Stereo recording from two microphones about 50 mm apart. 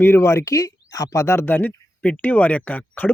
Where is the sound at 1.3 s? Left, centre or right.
Left.